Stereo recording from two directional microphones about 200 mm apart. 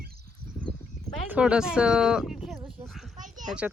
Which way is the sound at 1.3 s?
5° right (ahead or behind).